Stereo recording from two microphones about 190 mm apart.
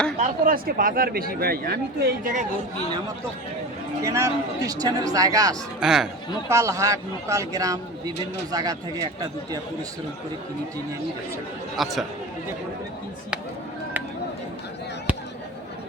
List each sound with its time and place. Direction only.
0.2 s speech: 50° right (ahead or behind)
4.0 s speech: 15° right (ahead or behind)
5.8 s speech: centre (ahead or behind)
6.5 s speech: 15° right (ahead or behind)
11.8 s speech: centre (ahead or behind)